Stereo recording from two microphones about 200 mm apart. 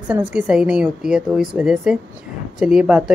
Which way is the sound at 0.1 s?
5° right (ahead or behind).